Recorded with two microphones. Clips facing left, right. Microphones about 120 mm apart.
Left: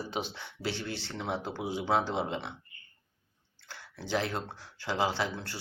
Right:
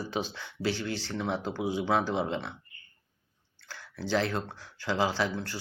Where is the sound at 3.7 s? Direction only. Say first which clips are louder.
Right 3 dB; 25° left (ahead or behind).